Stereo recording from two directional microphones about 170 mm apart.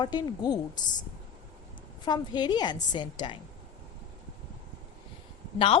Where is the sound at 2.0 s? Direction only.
25° left (ahead or behind).